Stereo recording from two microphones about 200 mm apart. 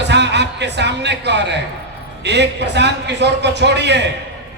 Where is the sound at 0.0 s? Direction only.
60° right (ahead or behind).